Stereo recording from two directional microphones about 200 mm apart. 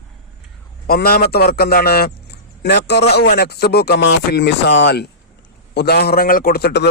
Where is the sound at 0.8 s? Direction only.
50° left (ahead or behind).